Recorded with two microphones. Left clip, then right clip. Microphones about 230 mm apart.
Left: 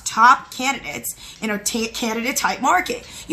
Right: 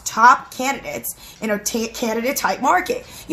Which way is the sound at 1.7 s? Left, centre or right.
Centre.